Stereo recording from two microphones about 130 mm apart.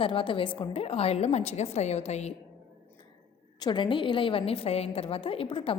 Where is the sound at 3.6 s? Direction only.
35° left (ahead or behind).